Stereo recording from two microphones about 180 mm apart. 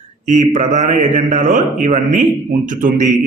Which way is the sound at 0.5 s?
40° right (ahead or behind).